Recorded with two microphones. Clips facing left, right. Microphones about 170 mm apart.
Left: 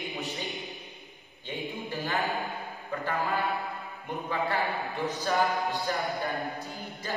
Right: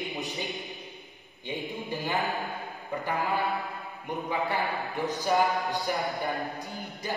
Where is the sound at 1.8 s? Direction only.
15° right (ahead or behind).